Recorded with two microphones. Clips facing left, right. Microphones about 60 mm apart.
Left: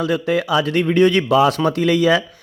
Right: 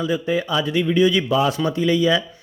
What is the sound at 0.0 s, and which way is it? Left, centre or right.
Speech, left.